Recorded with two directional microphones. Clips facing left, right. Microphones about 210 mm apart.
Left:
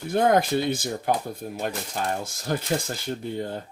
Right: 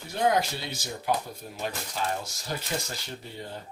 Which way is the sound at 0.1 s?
50° left (ahead or behind).